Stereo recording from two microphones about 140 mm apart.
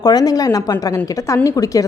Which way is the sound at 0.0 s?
30° left (ahead or behind).